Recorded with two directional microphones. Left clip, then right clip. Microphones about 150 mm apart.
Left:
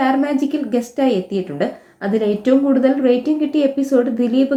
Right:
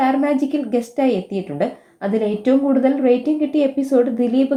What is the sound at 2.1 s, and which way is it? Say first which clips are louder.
Speech: left 2 dB; 30° right (ahead or behind).